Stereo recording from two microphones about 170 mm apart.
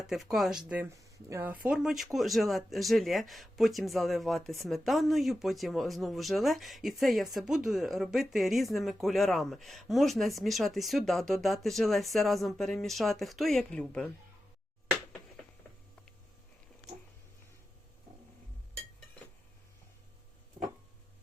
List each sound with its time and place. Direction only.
0.1 s speech: centre (ahead or behind)
0.9 s speech: 15° right (ahead or behind); by 14.1 s 5° left (ahead or behind)